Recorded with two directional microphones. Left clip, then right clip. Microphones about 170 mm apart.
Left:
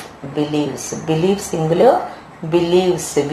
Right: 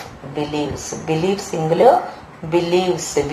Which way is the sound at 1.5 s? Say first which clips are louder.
Right 1 dB; 15° right (ahead or behind).